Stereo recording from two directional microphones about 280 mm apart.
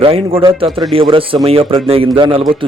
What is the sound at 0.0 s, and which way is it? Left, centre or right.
A man's voice, centre.